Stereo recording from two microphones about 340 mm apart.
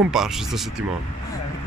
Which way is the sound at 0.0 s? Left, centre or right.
Centre.